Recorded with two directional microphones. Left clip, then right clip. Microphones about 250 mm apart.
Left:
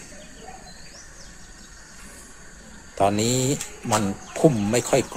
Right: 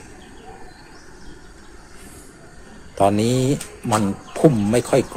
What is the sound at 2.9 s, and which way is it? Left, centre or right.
A man's voice, centre.